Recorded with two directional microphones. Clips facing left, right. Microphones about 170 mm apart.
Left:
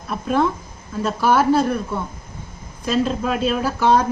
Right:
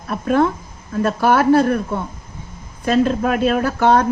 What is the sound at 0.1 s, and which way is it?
Speech, 55° right (ahead or behind).